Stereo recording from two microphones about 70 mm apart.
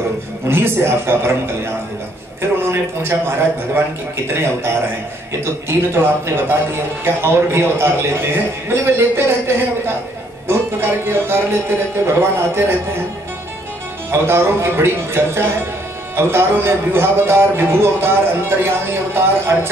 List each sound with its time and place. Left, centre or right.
0.5 s a man's voice: right
2.7 s a man's voice: right
5.4 s a man's voice: right
14.1 s a man's voice: right